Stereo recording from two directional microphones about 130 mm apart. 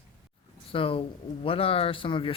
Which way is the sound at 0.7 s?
45° left (ahead or behind).